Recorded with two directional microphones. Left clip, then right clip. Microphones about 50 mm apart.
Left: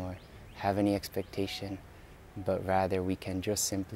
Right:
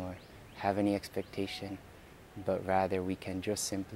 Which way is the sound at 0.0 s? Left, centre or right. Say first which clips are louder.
Left 1 dB; left.